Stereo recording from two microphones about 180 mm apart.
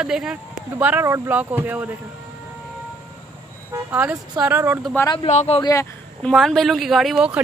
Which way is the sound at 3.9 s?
10° right (ahead or behind).